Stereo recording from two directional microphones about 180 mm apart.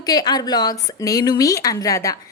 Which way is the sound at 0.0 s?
20° left (ahead or behind).